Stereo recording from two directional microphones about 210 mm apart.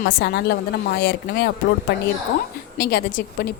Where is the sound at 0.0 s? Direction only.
50° left (ahead or behind).